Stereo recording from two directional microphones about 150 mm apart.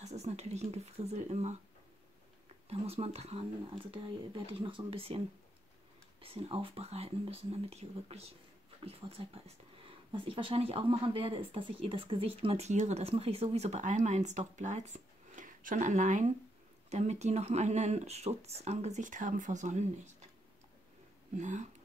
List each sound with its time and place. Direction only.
0.0 s speech: 45° right (ahead or behind)
2.7 s speech: 45° right (ahead or behind)
6.2 s speech: 40° right (ahead or behind)
21.4 s speech: 55° right (ahead or behind)